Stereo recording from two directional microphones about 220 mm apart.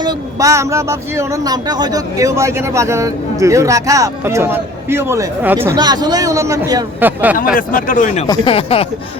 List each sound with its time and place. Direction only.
0.0 s speech: 15° right (ahead or behind)
7.5 s speech: 40° left (ahead or behind)
8.3 s speech: 25° left (ahead or behind)